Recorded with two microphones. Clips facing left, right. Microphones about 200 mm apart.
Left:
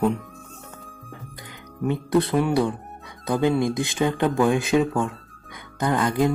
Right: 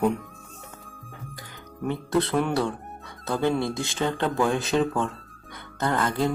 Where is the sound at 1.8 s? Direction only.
15° left (ahead or behind).